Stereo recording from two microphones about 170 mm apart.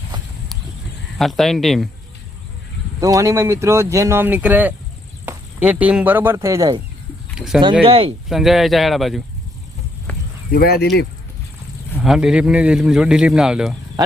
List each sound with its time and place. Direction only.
1.2 s a man's voice: centre (ahead or behind)
3.0 s speech: 20° right (ahead or behind)
7.3 s speech: 5° right (ahead or behind)
7.6 s speech: 30° right (ahead or behind)
8.3 s a man's voice: centre (ahead or behind)
10.1 s a sound: 10° left (ahead or behind)
10.5 s speech: 65° left (ahead or behind)
12.0 s a man's voice: 5° right (ahead or behind)